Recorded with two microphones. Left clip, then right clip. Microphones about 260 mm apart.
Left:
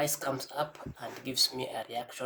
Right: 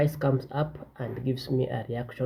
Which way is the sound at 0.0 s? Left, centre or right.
Centre.